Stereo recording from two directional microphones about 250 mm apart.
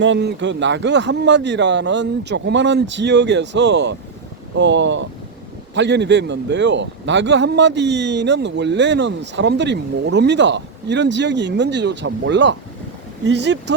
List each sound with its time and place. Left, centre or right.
0.0 s a man's voice: right